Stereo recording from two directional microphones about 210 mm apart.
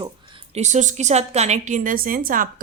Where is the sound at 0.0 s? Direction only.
20° right (ahead or behind).